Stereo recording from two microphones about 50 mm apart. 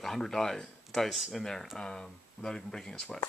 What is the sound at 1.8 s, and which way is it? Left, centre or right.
Speech, centre.